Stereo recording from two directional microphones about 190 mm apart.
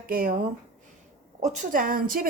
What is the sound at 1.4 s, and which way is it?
Speech, 45° right (ahead or behind).